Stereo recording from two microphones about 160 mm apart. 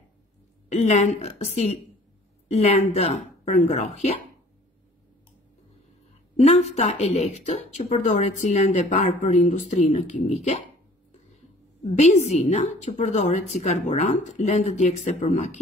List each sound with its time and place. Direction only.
0.7 s speech: 45° left (ahead or behind)
6.3 s speech: 40° left (ahead or behind)
11.9 s speech: 50° left (ahead or behind)